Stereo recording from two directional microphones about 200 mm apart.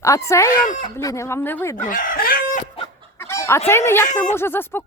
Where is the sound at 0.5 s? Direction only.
45° left (ahead or behind).